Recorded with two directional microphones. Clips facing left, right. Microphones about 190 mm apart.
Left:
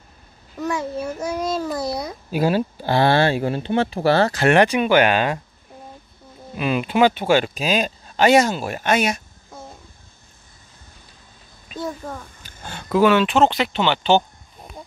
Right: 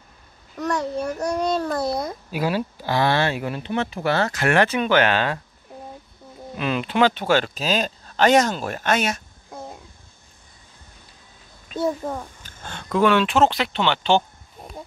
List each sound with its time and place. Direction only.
0.6 s speech: 5° left (ahead or behind)
2.3 s speech: 30° left (ahead or behind)
4.6 s speech: 15° left (ahead or behind)
6.5 s speech: 10° left (ahead or behind)
12.4 s speech: 10° left (ahead or behind)